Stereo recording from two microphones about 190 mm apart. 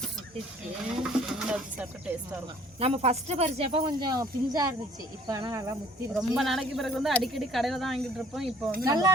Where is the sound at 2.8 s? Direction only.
35° right (ahead or behind).